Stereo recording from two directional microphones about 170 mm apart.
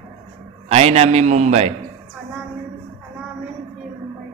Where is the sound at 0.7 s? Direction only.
40° right (ahead or behind).